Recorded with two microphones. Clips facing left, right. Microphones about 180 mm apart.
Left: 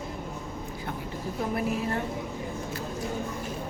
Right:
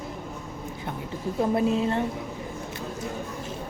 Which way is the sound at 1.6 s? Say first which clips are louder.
Right 5 dB; 25° right (ahead or behind).